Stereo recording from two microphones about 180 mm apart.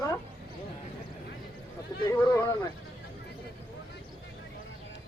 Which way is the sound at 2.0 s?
20° left (ahead or behind).